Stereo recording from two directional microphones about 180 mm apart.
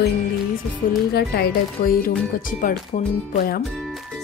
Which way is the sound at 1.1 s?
60° left (ahead or behind).